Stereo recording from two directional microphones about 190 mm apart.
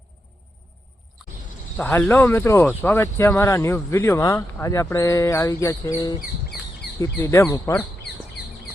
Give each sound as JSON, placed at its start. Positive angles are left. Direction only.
{"t": 1.7, "sound": "speech", "side_deg": 10}